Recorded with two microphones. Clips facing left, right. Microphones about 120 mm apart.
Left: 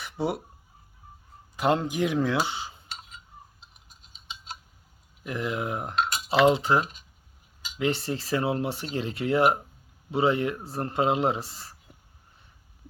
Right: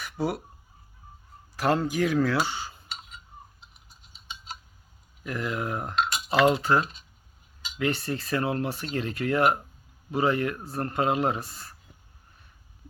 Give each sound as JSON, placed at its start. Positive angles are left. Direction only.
{"t": 0.0, "sound": "fowl", "side_deg": 25}
{"t": 1.5, "sound": "speech", "side_deg": 20}
{"t": 5.2, "sound": "cutlery", "side_deg": 20}
{"t": 7.8, "sound": "speech", "side_deg": 25}